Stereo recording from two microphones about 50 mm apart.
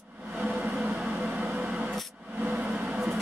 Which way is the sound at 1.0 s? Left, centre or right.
Right.